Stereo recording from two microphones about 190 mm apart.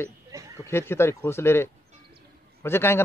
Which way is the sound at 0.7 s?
10° left (ahead or behind).